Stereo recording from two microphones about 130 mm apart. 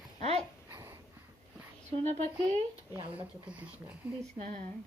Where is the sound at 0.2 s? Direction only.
55° right (ahead or behind).